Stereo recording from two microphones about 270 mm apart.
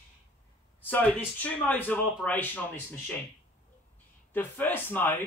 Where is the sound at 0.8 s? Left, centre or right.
Centre.